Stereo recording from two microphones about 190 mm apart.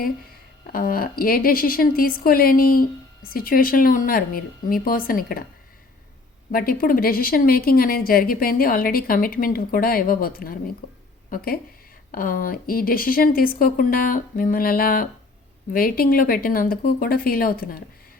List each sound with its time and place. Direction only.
0.7 s a woman's voice: 50° left (ahead or behind)
6.5 s a woman's voice: 50° left (ahead or behind)
10.8 s a sound: 50° left (ahead or behind)
11.3 s a woman's voice: 50° left (ahead or behind)